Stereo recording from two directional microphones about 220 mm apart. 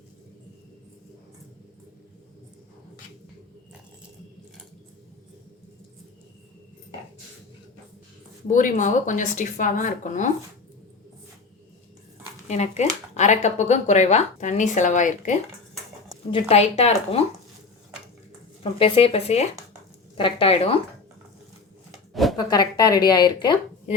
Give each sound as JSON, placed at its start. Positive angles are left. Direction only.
{"t": 8.4, "sound": "speech", "side_deg": 35}
{"t": 12.5, "sound": "a woman's voice", "side_deg": 30}
{"t": 18.6, "sound": "a woman's voice", "side_deg": 25}
{"t": 21.9, "sound": "a sound", "side_deg": 0}
{"t": 22.4, "sound": "a woman's voice", "side_deg": 20}